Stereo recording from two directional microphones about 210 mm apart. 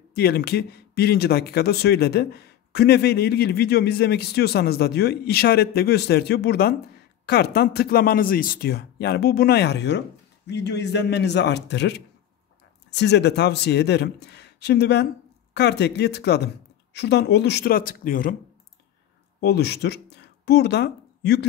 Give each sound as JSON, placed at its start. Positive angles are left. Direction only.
{"t": 0.1, "sound": "speech", "side_deg": 50}
{"t": 19.4, "sound": "speech", "side_deg": 50}